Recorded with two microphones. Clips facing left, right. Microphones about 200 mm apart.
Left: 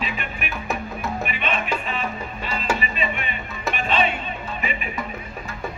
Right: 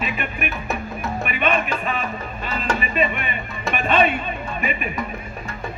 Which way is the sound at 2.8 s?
50° right (ahead or behind).